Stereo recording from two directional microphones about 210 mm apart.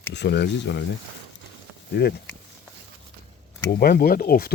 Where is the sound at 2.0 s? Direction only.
55° left (ahead or behind).